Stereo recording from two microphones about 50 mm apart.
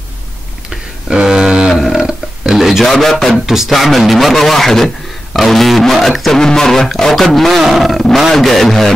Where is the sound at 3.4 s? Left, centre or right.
Centre.